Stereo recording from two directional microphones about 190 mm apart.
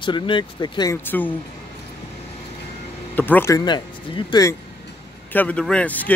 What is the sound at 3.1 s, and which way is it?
Speech, 10° left (ahead or behind).